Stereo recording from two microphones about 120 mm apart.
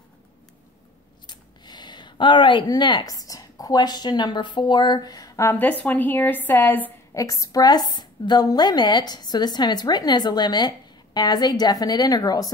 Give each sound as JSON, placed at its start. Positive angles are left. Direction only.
{"t": 1.2, "sound": "speech", "side_deg": 35}
{"t": 5.5, "sound": "speech", "side_deg": 15}
{"t": 7.2, "sound": "a woman's voice", "side_deg": 30}